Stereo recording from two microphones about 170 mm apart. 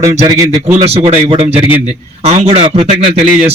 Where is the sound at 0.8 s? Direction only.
35° right (ahead or behind).